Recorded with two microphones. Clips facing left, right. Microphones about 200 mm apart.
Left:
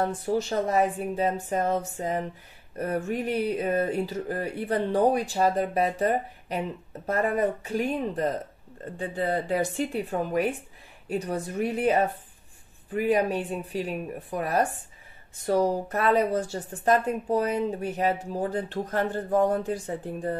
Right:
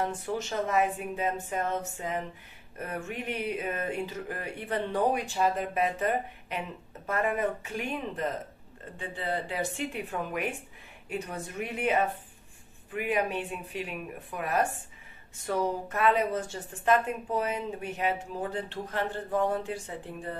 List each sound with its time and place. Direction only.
0.0 s a woman's voice: 35° left (ahead or behind)